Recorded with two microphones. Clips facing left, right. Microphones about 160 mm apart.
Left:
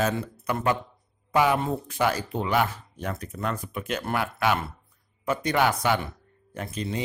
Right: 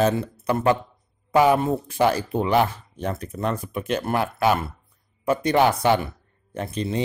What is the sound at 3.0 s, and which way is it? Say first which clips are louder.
Speech: right 5 dB; 30° right (ahead or behind).